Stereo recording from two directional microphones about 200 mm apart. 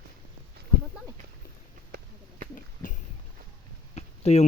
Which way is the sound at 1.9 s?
45° right (ahead or behind).